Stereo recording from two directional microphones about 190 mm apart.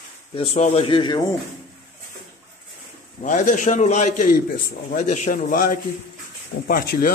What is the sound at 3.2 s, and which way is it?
A man's voice, 40° left (ahead or behind).